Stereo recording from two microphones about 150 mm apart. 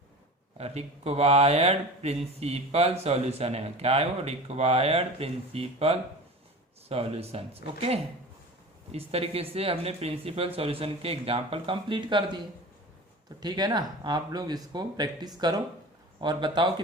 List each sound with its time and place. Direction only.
0.6 s speech: 45° right (ahead or behind)
13.4 s speech: 25° right (ahead or behind)